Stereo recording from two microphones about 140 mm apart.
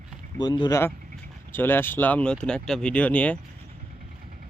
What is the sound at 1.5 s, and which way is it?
Speech, 15° left (ahead or behind).